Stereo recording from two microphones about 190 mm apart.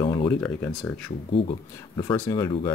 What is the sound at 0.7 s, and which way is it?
Speech, 5° left (ahead or behind).